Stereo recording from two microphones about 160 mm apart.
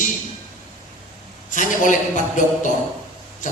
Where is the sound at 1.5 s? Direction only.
55° left (ahead or behind).